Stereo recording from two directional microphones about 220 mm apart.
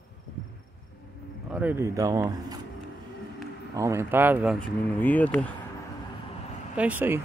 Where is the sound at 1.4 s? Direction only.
5° right (ahead or behind).